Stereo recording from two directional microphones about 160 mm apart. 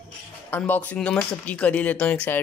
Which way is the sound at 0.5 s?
10° left (ahead or behind).